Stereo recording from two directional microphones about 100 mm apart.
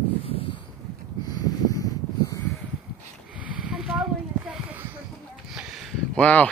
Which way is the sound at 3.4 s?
10° right (ahead or behind).